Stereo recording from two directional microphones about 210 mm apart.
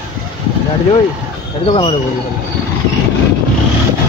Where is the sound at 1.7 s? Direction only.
25° left (ahead or behind).